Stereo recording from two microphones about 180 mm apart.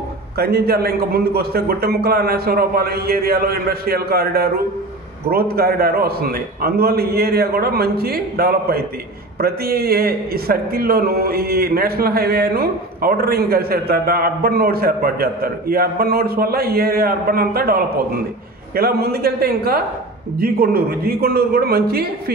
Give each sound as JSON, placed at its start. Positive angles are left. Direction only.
{"t": 0.4, "sound": "a man's voice", "side_deg": -60}